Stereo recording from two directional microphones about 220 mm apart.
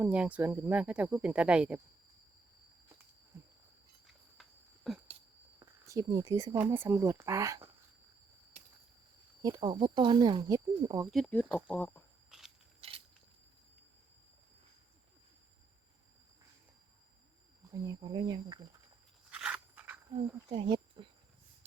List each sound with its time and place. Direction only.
0.0 s speech: 5° right (ahead or behind)
4.0 s a sound: centre (ahead or behind)
5.5 s speech: 15° right (ahead or behind)
9.4 s speech: 15° right (ahead or behind)
11.1 s speech: 5° left (ahead or behind)
12.8 s a sound: 25° right (ahead or behind)
17.7 s speech: 15° right (ahead or behind)
19.3 s a sound: 5° right (ahead or behind)
20.1 s speech: 20° right (ahead or behind)